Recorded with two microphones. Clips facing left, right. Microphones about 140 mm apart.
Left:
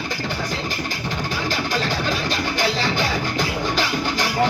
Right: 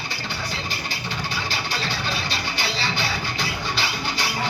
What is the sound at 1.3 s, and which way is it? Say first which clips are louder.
Music: left 7 dB; 45° left (ahead or behind).